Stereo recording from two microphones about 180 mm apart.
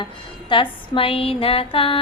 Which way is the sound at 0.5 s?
30° left (ahead or behind).